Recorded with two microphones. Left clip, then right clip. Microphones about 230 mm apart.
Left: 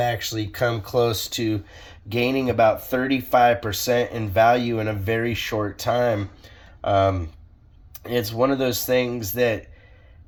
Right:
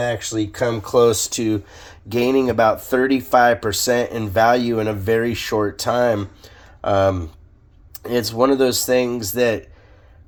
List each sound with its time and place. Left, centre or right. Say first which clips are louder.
0.3 s speech: right 3 dB; right